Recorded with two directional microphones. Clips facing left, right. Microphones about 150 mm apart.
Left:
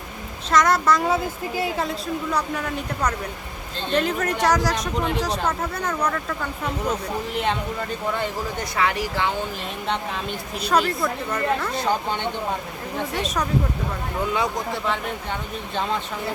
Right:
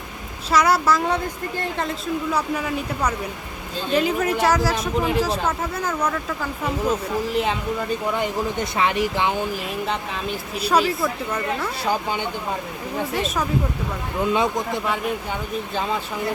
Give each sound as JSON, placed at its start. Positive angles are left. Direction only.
{"t": 0.5, "sound": "speech", "side_deg": -5}
{"t": 8.2, "sound": "speech", "side_deg": -20}
{"t": 9.8, "sound": "speech", "side_deg": -5}
{"t": 15.7, "sound": "speech", "side_deg": -5}